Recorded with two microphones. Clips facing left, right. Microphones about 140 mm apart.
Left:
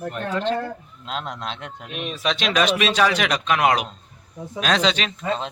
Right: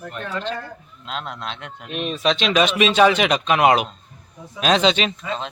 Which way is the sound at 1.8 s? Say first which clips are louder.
Right 5 dB; 5° left (ahead or behind).